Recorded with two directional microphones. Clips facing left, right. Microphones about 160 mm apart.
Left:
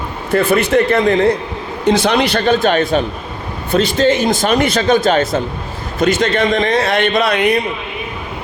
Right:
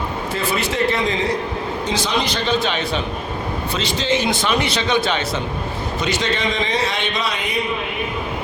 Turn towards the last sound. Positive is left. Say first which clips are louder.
# left 10 dB
turn(degrees=65)  # may be behind; listen again after turning